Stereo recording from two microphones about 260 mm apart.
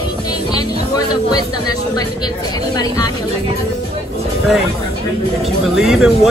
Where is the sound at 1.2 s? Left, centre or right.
Centre.